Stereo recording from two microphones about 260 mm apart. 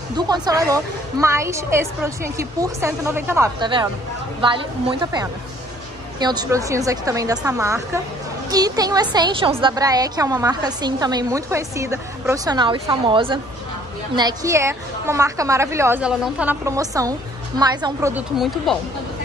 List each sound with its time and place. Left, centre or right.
0.1 s a woman's voice: centre
18.7 s speech: centre